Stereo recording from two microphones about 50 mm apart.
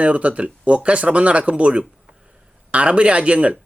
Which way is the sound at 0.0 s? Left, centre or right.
Right.